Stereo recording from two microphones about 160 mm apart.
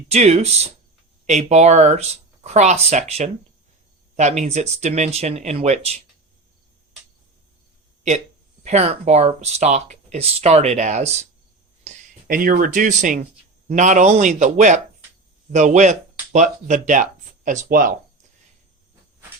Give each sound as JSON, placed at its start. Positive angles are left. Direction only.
{"t": 0.1, "sound": "speech", "side_deg": -45}
{"t": 8.6, "sound": "speech", "side_deg": -40}
{"t": 12.3, "sound": "speech", "side_deg": -60}